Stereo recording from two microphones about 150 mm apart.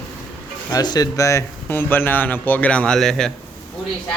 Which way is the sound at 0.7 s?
25° left (ahead or behind).